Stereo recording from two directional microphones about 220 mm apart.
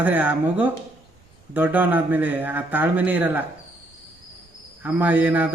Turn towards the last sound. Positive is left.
turn(degrees=-10)  # may be behind; listen again after turning